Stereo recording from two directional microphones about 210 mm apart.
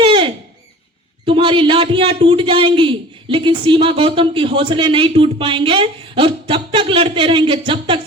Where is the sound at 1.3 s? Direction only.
25° right (ahead or behind).